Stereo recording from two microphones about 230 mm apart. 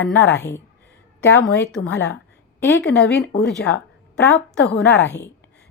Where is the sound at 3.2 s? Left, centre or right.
Left.